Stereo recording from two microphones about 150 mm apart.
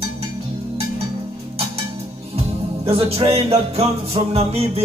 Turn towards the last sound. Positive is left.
turn(degrees=-40)  # may be behind; listen again after turning